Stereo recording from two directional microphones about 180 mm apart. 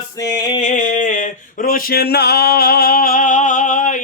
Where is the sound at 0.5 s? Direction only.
40° left (ahead or behind).